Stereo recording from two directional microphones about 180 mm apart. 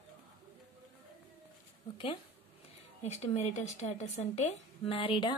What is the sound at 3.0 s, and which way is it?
A woman's voice, 40° left (ahead or behind).